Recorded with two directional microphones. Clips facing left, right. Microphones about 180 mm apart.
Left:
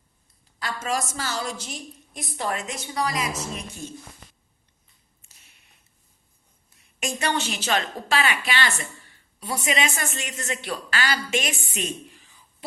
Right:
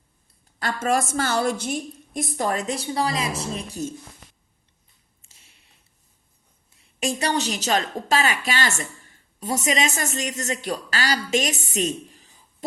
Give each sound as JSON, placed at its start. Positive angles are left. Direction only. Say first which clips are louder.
{"t": 0.6, "sound": "a woman's voice", "louder": "right 5 dB", "side_deg": -55}
{"t": 5.2, "sound": "a sound", "louder": "right 2 dB", "side_deg": -30}
{"t": 7.0, "sound": "a woman's voice", "louder": "right 3 dB", "side_deg": -35}